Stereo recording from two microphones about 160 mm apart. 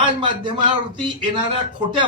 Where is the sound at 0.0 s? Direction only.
30° right (ahead or behind).